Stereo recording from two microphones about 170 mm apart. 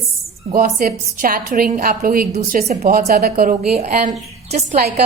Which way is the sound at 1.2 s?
55° right (ahead or behind).